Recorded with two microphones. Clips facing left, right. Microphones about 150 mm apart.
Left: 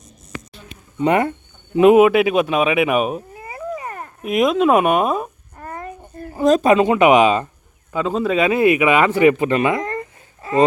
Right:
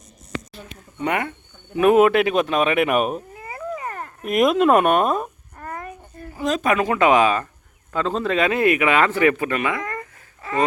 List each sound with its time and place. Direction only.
1.0 s speech: 30° left (ahead or behind)
1.7 s speech: 20° left (ahead or behind)
2.0 s speech: 5° left (ahead or behind)
3.3 s a sound: 25° left (ahead or behind)
4.2 s speech: centre (ahead or behind)
5.5 s a sound: 25° left (ahead or behind); by 6.7 s 45° left (ahead or behind)
6.7 s speech: 25° left (ahead or behind)
7.9 s speech: 5° left (ahead or behind)
9.5 s babbling: 25° left (ahead or behind)